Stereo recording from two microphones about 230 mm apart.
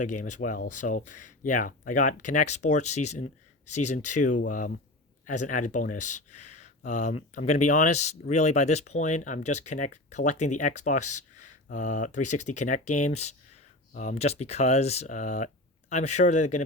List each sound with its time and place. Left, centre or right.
0.0 s speech: left